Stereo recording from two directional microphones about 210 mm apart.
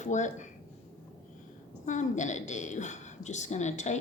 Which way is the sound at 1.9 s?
35° left (ahead or behind).